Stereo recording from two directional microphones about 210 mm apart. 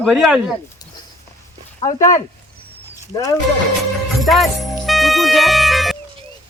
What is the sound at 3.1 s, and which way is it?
Speech, 20° left (ahead or behind).